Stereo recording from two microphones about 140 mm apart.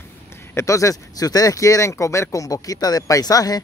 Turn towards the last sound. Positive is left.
turn(degrees=25)  # may be behind; listen again after turning